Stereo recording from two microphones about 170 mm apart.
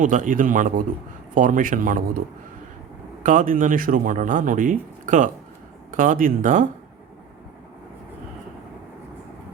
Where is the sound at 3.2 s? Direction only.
50° right (ahead or behind).